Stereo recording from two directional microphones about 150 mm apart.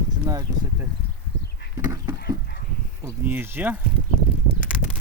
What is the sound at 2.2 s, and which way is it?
Chicken, 90° left.